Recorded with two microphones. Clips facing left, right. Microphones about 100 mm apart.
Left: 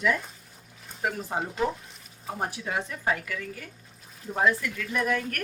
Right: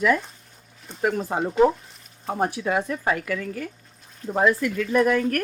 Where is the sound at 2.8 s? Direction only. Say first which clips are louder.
Right 5 dB; 65° right (ahead or behind).